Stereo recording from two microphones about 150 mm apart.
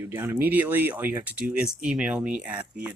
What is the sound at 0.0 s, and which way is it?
Speech, 15° right (ahead or behind).